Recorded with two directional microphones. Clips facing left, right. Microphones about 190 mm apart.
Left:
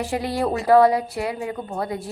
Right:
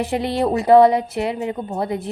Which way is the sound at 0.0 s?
20° right (ahead or behind).